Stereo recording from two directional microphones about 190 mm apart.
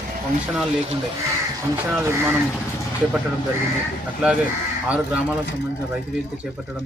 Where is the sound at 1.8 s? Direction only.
10° right (ahead or behind).